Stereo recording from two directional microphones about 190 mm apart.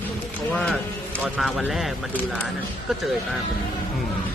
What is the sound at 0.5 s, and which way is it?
Speech, 5° left (ahead or behind).